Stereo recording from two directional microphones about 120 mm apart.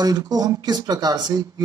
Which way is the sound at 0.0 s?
35° right (ahead or behind).